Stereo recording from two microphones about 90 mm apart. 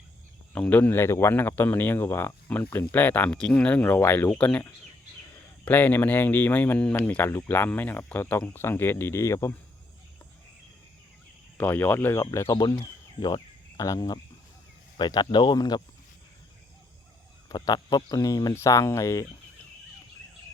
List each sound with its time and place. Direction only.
0.5 s speech: 20° left (ahead or behind)
4.3 s speech: 10° left (ahead or behind)
5.6 s speech: 20° left (ahead or behind)
7.3 s speech: 25° left (ahead or behind)
11.5 s speech: 20° left (ahead or behind)
12.6 s a sound: 55° left (ahead or behind)
13.8 s speech: 40° left (ahead or behind)
14.9 s speech: 55° left (ahead or behind)
17.5 s speech: 50° left (ahead or behind); by 19.2 s 35° left (ahead or behind)